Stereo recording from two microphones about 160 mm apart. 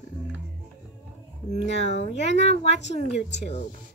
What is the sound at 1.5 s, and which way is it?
Speech, 45° left (ahead or behind).